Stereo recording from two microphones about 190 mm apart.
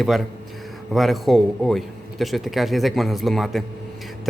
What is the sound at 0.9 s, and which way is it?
A man's voice, centre (ahead or behind).